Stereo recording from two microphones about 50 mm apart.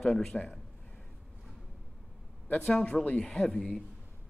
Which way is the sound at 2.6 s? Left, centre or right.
Centre.